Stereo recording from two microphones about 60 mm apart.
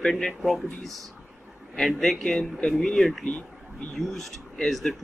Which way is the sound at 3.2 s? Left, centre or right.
Centre.